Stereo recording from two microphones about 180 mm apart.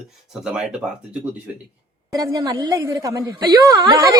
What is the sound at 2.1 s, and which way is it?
Speech, 20° right (ahead or behind).